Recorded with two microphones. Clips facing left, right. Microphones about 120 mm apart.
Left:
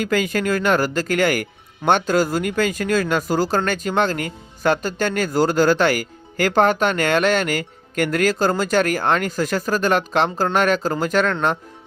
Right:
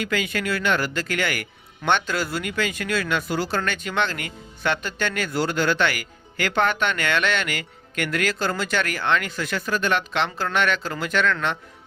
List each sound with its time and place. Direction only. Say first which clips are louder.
0.0 s speech: left 5 dB; 40° left (ahead or behind)